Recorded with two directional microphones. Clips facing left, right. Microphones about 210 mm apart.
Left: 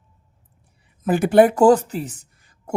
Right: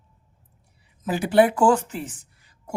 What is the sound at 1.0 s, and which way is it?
Speech, 50° left (ahead or behind).